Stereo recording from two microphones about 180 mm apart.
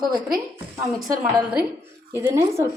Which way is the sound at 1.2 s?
10° right (ahead or behind).